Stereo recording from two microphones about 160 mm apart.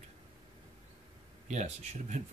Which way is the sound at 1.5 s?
50° right (ahead or behind).